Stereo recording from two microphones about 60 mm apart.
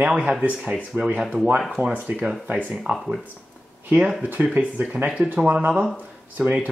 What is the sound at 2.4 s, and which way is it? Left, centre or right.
Speech, right.